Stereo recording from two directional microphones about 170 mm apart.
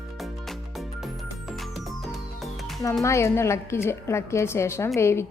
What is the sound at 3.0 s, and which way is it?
A woman's voice, 15° left (ahead or behind).